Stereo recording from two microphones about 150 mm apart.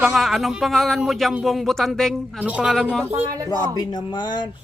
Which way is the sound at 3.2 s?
20° right (ahead or behind).